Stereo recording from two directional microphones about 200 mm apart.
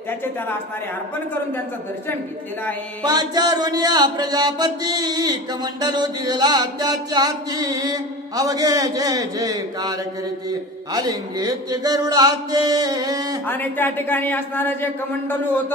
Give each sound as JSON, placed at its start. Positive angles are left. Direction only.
{"t": 3.0, "sound": "mantra", "side_deg": -20}
{"t": 13.5, "sound": "a man's voice", "side_deg": 10}